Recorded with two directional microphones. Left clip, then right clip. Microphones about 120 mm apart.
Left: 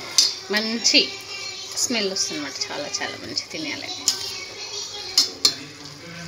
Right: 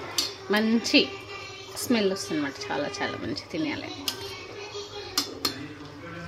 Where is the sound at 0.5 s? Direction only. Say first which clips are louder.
Left 3 dB; 25° right (ahead or behind).